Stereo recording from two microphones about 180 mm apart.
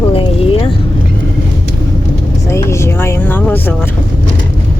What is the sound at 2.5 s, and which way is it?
Speech, 15° left (ahead or behind).